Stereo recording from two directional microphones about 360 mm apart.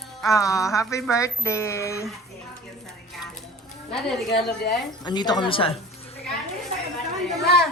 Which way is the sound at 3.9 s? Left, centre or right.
Centre.